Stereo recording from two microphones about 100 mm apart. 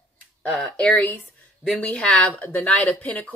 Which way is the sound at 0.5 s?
5° left (ahead or behind).